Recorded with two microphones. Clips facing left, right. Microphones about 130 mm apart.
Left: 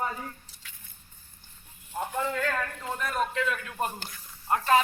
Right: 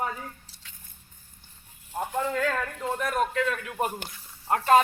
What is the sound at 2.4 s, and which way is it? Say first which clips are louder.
A man's voice: right 3 dB; 5° right (ahead or behind).